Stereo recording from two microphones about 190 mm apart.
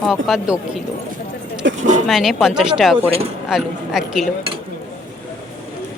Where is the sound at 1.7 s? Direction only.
40° right (ahead or behind).